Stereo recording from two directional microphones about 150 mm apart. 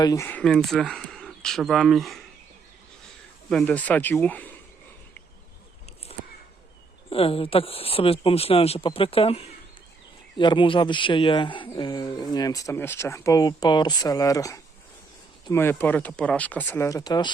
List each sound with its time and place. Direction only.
0.0 s speech: 25° left (ahead or behind)
0.3 s speech: 5° left (ahead or behind)
3.5 s speech: 10° left (ahead or behind)
7.1 s speech: 40° left (ahead or behind)